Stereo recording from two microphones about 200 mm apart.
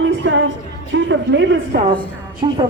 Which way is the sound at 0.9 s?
65° right (ahead or behind).